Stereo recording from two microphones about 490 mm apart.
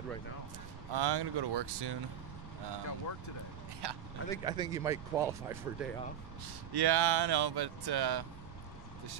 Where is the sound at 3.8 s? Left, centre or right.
Right.